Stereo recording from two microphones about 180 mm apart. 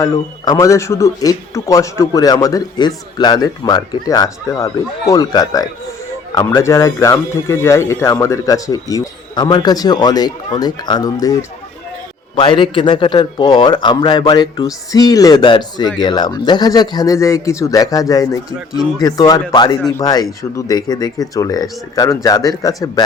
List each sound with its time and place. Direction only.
0.0 s a man's voice: 20° left (ahead or behind)
12.4 s a man's voice: 30° left (ahead or behind)
18.7 s a man's voice: centre (ahead or behind)
19.0 s a man's voice: 20° left (ahead or behind)